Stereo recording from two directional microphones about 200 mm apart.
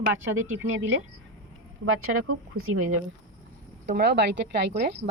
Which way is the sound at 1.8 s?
90° right.